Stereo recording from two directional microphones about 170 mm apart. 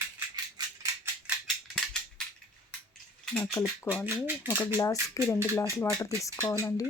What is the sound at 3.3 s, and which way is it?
Speech, 5° left (ahead or behind).